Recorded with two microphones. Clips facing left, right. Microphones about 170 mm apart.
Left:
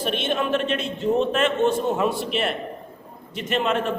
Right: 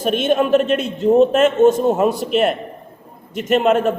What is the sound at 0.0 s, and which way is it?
A man's voice, 45° right (ahead or behind).